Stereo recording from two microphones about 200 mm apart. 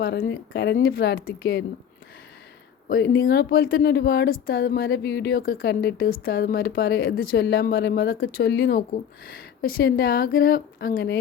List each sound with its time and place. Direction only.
0.0 s speech: 55° left (ahead or behind)
2.9 s speech: 50° left (ahead or behind)